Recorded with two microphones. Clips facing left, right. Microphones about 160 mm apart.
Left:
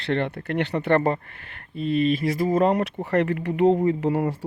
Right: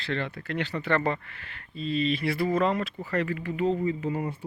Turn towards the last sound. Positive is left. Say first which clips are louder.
# left 7 dB
turn(degrees=85)